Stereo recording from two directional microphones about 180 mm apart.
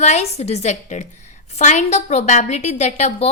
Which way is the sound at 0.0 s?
35° left (ahead or behind).